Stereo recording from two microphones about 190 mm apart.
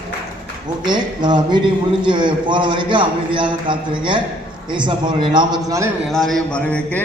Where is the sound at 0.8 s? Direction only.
25° right (ahead or behind).